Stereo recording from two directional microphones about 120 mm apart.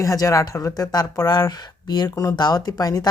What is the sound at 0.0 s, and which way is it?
Speech, 25° left (ahead or behind).